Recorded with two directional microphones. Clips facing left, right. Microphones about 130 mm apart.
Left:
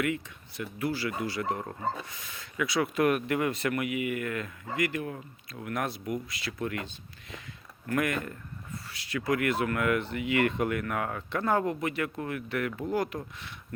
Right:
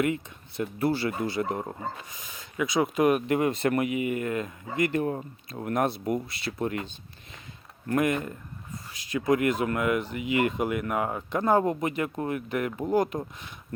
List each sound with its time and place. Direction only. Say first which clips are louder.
0.0 s speech: right 4 dB; 30° right (ahead or behind)